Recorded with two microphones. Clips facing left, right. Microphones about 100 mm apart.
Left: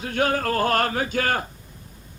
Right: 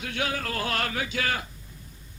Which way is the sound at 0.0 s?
45° left (ahead or behind).